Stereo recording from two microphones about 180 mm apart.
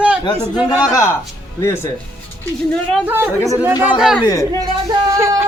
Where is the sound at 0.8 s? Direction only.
15° left (ahead or behind).